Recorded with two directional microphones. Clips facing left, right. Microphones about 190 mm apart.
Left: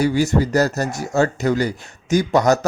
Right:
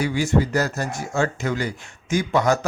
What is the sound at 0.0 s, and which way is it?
A man's voice, 40° left (ahead or behind).